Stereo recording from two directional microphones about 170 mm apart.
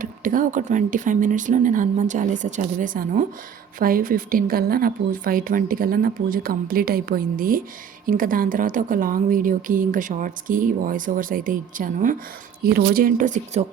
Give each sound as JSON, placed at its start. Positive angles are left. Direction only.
{"t": 0.0, "sound": "a woman's voice", "side_deg": -50}